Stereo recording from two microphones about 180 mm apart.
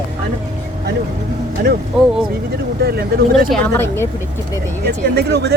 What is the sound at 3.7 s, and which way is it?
Speech, 15° left (ahead or behind).